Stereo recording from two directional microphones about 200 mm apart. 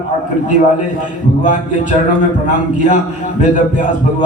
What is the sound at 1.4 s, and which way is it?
Speech, 40° left (ahead or behind).